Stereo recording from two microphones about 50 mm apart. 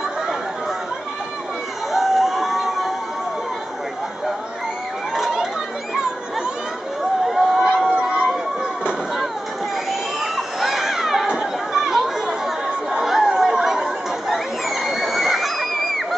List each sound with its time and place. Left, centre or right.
1.9 s crowd: centre
5.1 s chatter: centre
7.2 s a sound: centre
7.6 s a sound: centre
10.2 s crowd: centre
11.2 s chatter: centre